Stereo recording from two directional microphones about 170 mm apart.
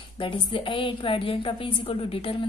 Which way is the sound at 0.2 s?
30° left (ahead or behind).